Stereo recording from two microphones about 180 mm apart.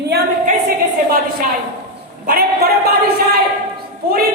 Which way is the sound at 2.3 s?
55° right (ahead or behind).